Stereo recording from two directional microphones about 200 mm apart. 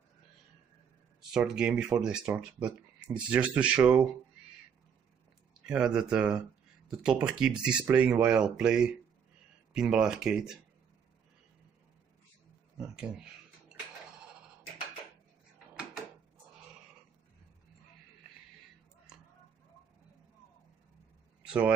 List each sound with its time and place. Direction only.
1.3 s speech: 5° right (ahead or behind)
5.7 s speech: 5° right (ahead or behind)
12.8 s speech: 5° right (ahead or behind)
21.4 s a sound: 5° right (ahead or behind)